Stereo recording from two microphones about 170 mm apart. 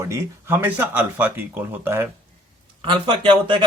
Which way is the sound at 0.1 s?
15° right (ahead or behind).